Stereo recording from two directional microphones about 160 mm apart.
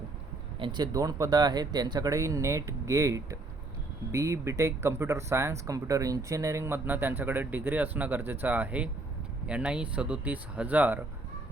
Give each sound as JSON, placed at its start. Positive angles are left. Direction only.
{"t": 0.6, "sound": "speech", "side_deg": -25}